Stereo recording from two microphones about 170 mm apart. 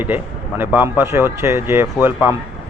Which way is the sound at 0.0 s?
10° right (ahead or behind).